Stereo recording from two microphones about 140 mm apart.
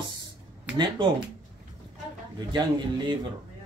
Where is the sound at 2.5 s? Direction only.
30° right (ahead or behind).